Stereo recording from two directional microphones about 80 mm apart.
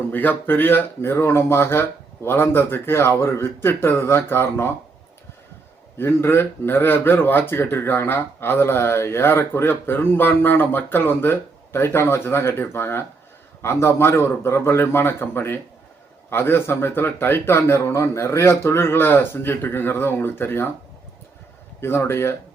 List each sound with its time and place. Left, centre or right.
0.1 s speech: left
6.0 s speech: left
21.8 s speech: left